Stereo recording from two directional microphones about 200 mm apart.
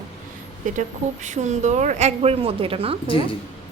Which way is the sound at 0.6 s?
40° right (ahead or behind).